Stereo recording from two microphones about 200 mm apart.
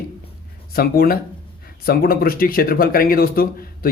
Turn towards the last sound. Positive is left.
turn(degrees=45)  # may be behind; listen again after turning